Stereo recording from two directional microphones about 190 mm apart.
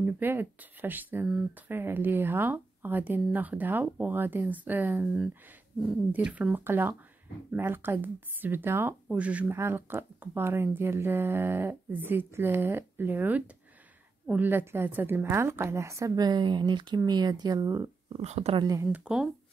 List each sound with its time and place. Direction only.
0.0 s speech: 10° right (ahead or behind)
5.0 s speech: centre (ahead or behind); by 17.9 s 15° right (ahead or behind)
18.1 s speech: 35° right (ahead or behind)
18.6 s speech: 15° right (ahead or behind)